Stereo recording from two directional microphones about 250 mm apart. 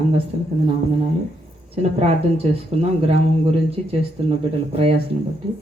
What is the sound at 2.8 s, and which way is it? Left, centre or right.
Speech, right.